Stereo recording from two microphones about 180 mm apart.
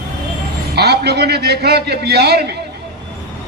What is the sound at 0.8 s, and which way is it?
A man's voice, 65° right (ahead or behind).